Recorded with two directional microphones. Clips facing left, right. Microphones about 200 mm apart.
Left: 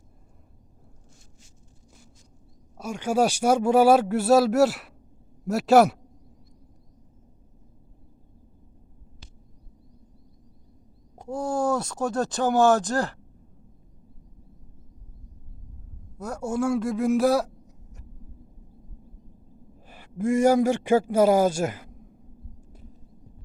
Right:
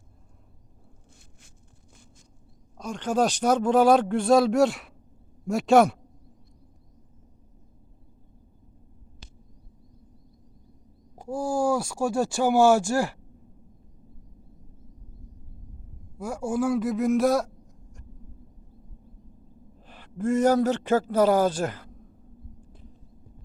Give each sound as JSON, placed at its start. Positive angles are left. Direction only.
{"t": 2.7, "sound": "speech", "side_deg": 10}
{"t": 11.2, "sound": "speech", "side_deg": -5}
{"t": 16.1, "sound": "a man's voice", "side_deg": -5}
{"t": 19.9, "sound": "speech", "side_deg": 10}
{"t": 22.6, "sound": "a sound", "side_deg": 40}